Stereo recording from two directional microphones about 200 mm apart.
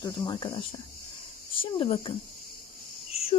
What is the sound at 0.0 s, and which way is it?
Speech, 25° left (ahead or behind).